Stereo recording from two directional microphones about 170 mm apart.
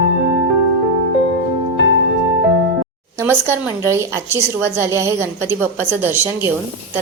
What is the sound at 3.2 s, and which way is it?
A woman's voice, 15° right (ahead or behind).